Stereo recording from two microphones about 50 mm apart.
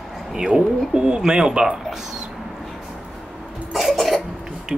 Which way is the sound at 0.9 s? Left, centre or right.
Centre.